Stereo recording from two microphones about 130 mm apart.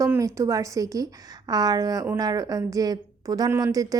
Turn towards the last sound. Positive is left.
turn(degrees=-25)  # may be behind; listen again after turning